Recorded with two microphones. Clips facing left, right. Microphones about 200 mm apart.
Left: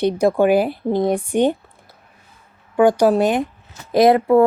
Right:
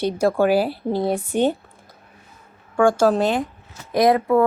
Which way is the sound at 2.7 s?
15° left (ahead or behind).